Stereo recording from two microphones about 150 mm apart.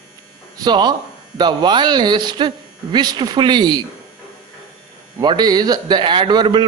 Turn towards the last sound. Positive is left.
turn(degrees=-30)  # may be behind; listen again after turning